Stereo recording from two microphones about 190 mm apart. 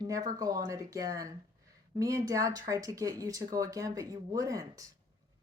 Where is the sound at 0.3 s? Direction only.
20° right (ahead or behind).